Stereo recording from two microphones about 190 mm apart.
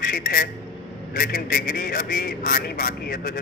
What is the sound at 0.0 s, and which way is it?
A man's voice, 50° left (ahead or behind).